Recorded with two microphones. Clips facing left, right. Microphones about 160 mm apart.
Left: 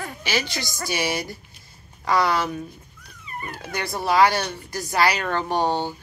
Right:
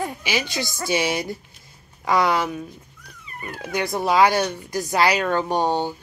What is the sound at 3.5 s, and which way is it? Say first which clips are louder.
Speech: right 5 dB; 20° right (ahead or behind).